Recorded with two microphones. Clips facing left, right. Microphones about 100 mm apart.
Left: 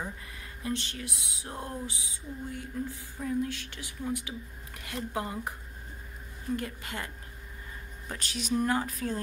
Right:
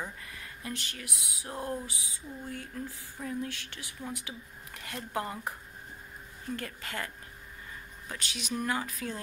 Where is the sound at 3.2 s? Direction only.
Centre (ahead or behind).